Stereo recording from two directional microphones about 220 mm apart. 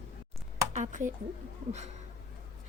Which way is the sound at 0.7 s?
35° right (ahead or behind).